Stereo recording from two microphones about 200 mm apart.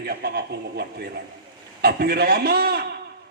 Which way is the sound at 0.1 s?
50° right (ahead or behind).